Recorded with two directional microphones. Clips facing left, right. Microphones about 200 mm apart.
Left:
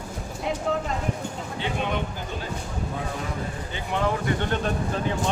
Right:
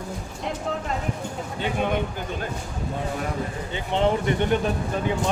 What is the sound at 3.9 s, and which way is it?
Speech, 25° right (ahead or behind).